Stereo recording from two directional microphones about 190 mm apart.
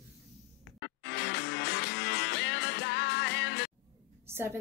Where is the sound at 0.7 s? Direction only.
65° left (ahead or behind).